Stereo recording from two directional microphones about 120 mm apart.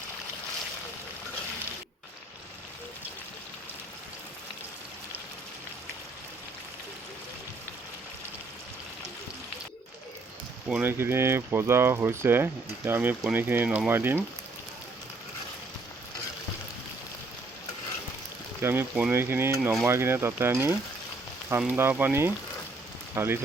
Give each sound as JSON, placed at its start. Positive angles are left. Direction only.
{"t": 10.7, "sound": "speech", "side_deg": -15}
{"t": 18.6, "sound": "speech", "side_deg": -20}